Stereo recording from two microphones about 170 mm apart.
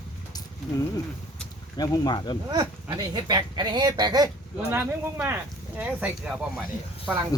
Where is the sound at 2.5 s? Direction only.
25° right (ahead or behind).